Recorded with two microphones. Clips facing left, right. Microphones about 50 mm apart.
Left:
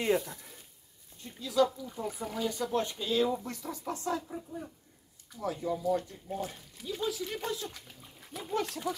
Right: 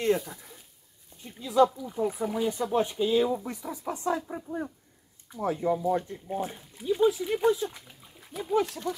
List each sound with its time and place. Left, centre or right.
0.0 s speech: centre
1.2 s speech: right
4.3 s speech: right
5.3 s speech: right
8.2 s speech: centre